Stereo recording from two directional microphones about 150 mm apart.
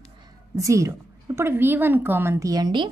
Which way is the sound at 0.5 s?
20° right (ahead or behind).